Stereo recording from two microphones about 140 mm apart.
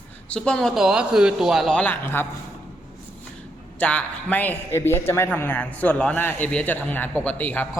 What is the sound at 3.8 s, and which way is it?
A man's voice, 10° left (ahead or behind).